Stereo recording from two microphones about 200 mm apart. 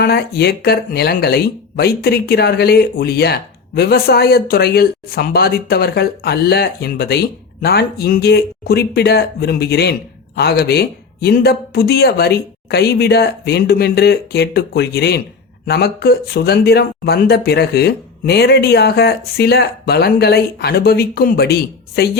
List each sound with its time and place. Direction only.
0.0 s speech: 50° left (ahead or behind)